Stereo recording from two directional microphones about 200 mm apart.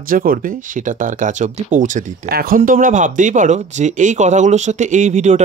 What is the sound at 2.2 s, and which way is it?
Speech, 50° right (ahead or behind).